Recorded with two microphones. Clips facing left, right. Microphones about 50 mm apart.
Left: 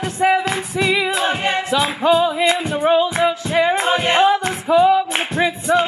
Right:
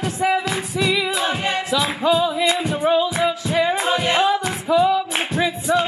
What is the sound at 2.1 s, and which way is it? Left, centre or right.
Music, left.